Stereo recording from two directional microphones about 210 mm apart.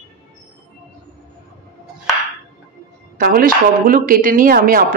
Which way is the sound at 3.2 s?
45° right (ahead or behind).